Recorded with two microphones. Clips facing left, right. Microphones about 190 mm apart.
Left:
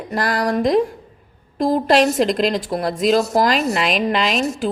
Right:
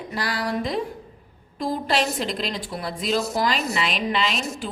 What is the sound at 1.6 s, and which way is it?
Speech, 45° left (ahead or behind).